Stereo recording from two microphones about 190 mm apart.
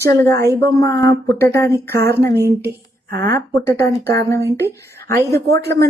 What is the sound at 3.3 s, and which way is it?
A woman's voice, 15° left (ahead or behind).